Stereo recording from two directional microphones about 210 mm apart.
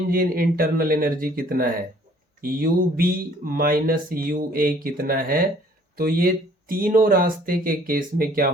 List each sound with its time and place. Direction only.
0.1 s speech: 45° right (ahead or behind)